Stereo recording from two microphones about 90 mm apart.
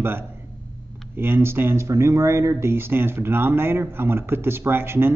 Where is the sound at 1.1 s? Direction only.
25° right (ahead or behind).